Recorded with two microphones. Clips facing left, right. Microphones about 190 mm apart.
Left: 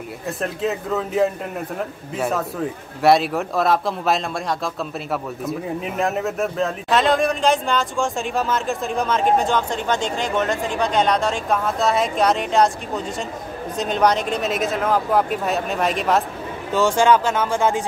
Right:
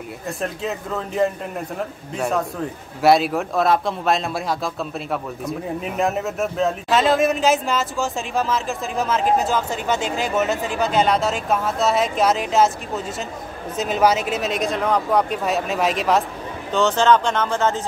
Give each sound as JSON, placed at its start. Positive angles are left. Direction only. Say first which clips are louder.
{"t": 0.4, "sound": "speech", "louder": "left 3 dB", "side_deg": 0}
{"t": 16.7, "sound": "speech", "louder": "even", "side_deg": 10}